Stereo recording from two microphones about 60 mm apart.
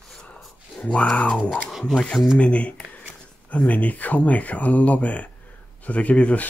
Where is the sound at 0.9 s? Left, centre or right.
Centre.